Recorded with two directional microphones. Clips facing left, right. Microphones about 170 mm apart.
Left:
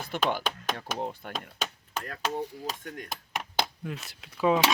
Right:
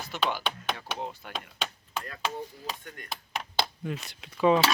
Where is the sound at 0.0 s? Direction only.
55° left (ahead or behind).